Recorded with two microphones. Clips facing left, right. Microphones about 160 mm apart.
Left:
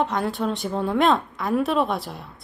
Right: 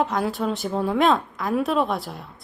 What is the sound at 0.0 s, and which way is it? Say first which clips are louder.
A woman's voice: even; centre (ahead or behind).